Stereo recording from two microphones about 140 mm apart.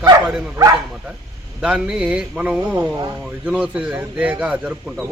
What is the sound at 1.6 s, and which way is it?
A man's voice, 5° right (ahead or behind).